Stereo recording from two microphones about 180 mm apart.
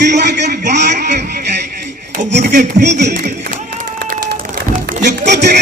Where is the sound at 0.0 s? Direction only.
70° right (ahead or behind).